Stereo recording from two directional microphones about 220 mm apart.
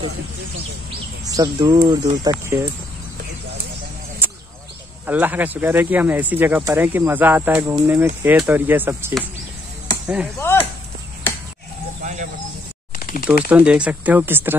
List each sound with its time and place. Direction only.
1.2 s speech: 15° right (ahead or behind)
5.0 s speech: 10° right (ahead or behind)
10.4 s a sound: 10° left (ahead or behind)
13.0 s typewriter: 40° left (ahead or behind)
13.5 s speech: 5° right (ahead or behind)